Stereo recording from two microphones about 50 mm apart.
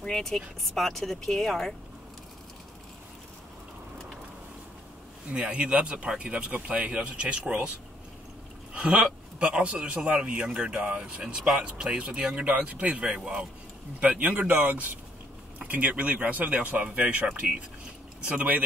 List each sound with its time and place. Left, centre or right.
0.0 s speech: centre
5.3 s a man's voice: right
8.7 s a man's voice: right
13.9 s a man's voice: right
14.5 s a man's voice: right